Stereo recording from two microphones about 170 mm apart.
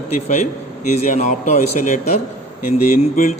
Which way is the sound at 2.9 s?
45° left (ahead or behind).